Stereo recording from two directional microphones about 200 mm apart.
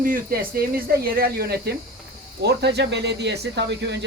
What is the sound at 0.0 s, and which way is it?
Speech, 45° right (ahead or behind).